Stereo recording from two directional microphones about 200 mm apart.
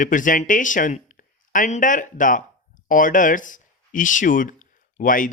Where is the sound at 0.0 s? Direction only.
40° left (ahead or behind).